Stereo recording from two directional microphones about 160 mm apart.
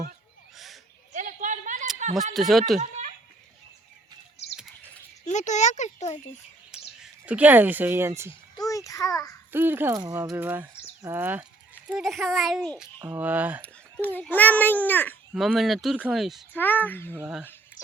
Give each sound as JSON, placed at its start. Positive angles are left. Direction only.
{"t": 0.5, "sound": "a sound", "side_deg": 0}
{"t": 1.1, "sound": "a sound", "side_deg": -50}
{"t": 2.3, "sound": "speech", "side_deg": 0}
{"t": 2.7, "sound": "a sound", "side_deg": -45}
{"t": 5.2, "sound": "speech", "side_deg": 50}
{"t": 7.0, "sound": "speech", "side_deg": -10}
{"t": 8.7, "sound": "a child's voice", "side_deg": 20}
{"t": 9.5, "sound": "speech", "side_deg": -15}
{"t": 11.9, "sound": "speech", "side_deg": 0}
{"t": 13.6, "sound": "a child's voice", "side_deg": 10}
{"t": 15.3, "sound": "speech", "side_deg": -5}
{"t": 16.5, "sound": "a child's voice", "side_deg": 10}
{"t": 17.1, "sound": "speech", "side_deg": -10}